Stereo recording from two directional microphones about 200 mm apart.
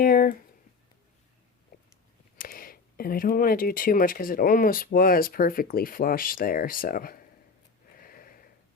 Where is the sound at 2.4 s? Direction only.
45° left (ahead or behind).